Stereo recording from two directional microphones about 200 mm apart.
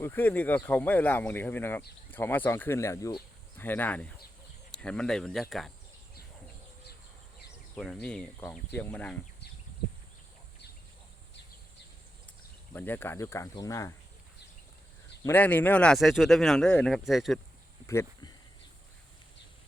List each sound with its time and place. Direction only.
0.0 s speech: 10° left (ahead or behind)
7.8 s speech: 5° left (ahead or behind)
12.7 s speech: 10° left (ahead or behind)
15.2 s speech: 10° left (ahead or behind)
17.8 s a sound: 15° left (ahead or behind)